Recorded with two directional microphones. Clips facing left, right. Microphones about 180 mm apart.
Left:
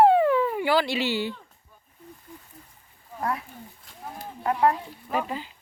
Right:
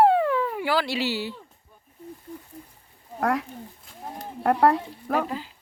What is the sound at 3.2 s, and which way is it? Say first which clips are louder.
Speech: right 5 dB; 85° right.